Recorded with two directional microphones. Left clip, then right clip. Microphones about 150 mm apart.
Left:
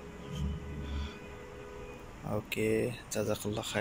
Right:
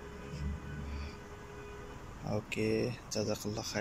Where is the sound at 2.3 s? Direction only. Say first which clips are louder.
Left 2 dB; 5° right (ahead or behind).